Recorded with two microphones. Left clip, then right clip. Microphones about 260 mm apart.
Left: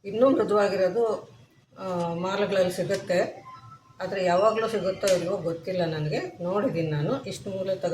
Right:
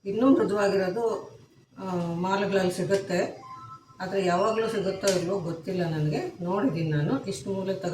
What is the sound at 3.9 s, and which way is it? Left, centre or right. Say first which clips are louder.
Speech: left 2 dB; left.